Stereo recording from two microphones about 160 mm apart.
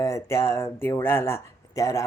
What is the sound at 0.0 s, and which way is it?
Speech, 20° left (ahead or behind).